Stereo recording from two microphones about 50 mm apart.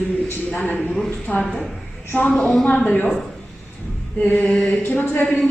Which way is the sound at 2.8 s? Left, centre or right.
Left.